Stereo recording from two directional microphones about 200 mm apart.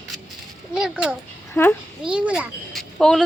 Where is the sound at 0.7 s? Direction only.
5° right (ahead or behind).